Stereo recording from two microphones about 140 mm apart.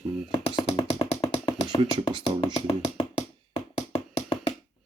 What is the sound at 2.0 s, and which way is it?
Speech, 40° right (ahead or behind).